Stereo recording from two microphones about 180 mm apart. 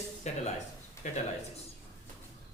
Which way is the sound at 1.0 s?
15° left (ahead or behind).